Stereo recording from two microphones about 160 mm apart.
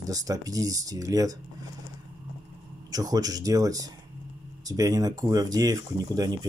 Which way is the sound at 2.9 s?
25° right (ahead or behind).